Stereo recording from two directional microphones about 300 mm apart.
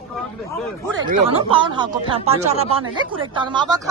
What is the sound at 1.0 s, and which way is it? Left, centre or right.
Speech, centre.